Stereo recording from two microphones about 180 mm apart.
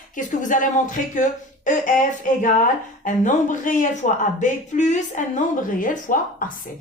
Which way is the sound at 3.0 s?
45° left (ahead or behind).